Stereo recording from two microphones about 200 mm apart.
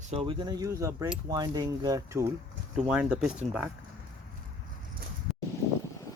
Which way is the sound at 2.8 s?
5° right (ahead or behind).